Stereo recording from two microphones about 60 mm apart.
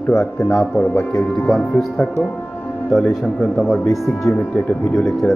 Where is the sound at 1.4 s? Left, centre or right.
Centre.